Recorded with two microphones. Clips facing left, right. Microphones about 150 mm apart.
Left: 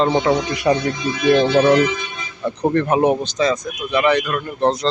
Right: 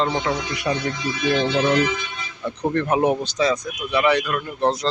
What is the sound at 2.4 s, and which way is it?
Speech, 40° left (ahead or behind).